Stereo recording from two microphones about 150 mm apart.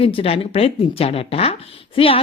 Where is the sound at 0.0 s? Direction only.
40° left (ahead or behind).